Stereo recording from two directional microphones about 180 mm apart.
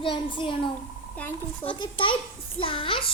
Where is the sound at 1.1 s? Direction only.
10° left (ahead or behind).